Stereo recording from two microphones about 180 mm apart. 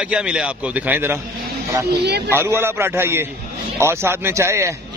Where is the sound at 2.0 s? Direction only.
65° right (ahead or behind).